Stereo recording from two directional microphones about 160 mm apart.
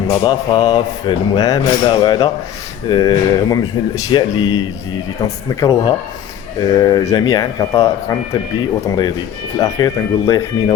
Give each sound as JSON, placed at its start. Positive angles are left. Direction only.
{"t": 0.1, "sound": "speech", "side_deg": 25}
{"t": 9.6, "sound": "speech", "side_deg": 20}